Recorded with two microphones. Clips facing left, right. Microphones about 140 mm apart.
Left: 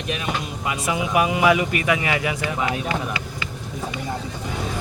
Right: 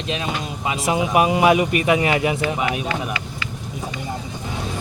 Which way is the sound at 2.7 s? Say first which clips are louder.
Right 1 dB; 25° left (ahead or behind).